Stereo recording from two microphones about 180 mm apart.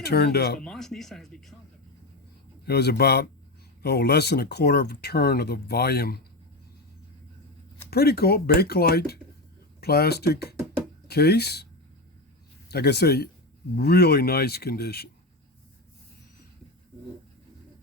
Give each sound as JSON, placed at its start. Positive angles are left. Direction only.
{"t": 0.0, "sound": "speech", "side_deg": 65}
{"t": 0.6, "sound": "speech", "side_deg": 5}
{"t": 2.6, "sound": "speech", "side_deg": 65}
{"t": 7.9, "sound": "speech", "side_deg": 60}
{"t": 12.7, "sound": "speech", "side_deg": 65}